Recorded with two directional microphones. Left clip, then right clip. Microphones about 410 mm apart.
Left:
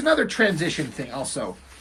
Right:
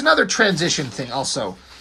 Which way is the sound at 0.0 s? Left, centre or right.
Centre.